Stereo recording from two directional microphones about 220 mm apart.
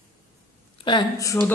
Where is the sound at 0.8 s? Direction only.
20° left (ahead or behind).